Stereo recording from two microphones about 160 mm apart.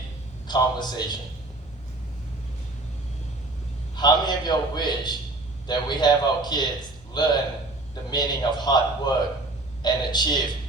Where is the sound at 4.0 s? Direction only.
25° left (ahead or behind).